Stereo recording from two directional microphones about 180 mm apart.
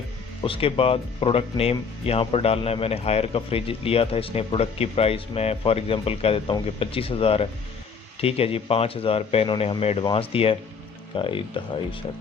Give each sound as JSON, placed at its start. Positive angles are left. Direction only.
{"t": 0.4, "sound": "speech", "side_deg": 30}